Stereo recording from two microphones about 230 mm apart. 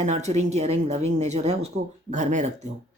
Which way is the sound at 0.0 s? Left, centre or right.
Right.